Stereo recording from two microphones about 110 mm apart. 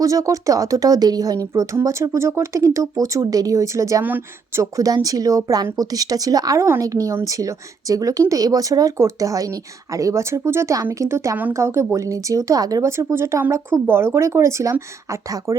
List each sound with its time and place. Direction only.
0.0 s speech: 30° right (ahead or behind)
4.0 s speech: 15° right (ahead or behind)
4.6 s speech: 30° right (ahead or behind)